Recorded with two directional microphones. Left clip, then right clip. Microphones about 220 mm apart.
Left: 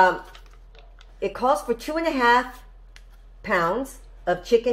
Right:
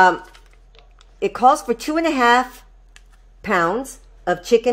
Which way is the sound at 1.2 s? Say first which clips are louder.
Right 7 dB; 55° right (ahead or behind).